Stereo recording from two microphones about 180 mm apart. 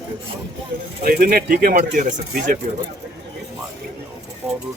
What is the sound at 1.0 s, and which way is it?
Speech, 55° right (ahead or behind).